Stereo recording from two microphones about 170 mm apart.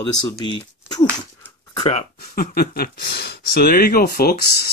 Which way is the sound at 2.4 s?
60° left (ahead or behind).